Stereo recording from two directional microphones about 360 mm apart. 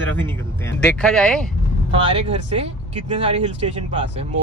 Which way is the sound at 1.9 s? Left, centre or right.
Centre.